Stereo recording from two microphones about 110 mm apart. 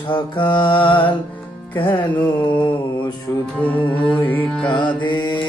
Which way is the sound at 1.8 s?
50° left (ahead or behind).